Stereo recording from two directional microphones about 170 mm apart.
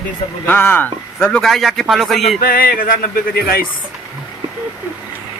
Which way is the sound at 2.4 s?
60° left (ahead or behind).